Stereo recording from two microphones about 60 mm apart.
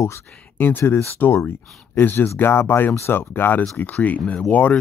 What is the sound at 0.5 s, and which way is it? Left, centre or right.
Speech, left.